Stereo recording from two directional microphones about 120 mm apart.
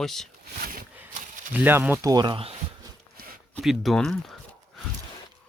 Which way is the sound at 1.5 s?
15° right (ahead or behind).